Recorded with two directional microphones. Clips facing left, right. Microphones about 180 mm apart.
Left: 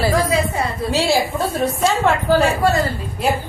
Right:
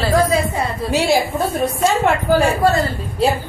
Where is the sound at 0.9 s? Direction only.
15° right (ahead or behind).